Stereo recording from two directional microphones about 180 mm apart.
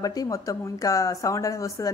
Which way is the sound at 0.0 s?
20° left (ahead or behind).